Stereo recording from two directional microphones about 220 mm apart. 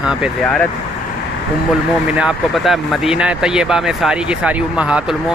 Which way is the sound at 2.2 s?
Centre (ahead or behind).